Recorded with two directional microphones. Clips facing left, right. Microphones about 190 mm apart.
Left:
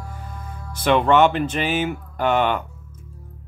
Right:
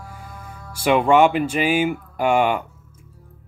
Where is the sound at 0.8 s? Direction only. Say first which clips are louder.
Right 1 dB; 10° right (ahead or behind).